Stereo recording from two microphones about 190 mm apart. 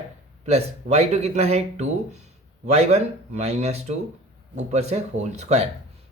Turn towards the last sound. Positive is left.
turn(degrees=-35)  # may be behind; listen again after turning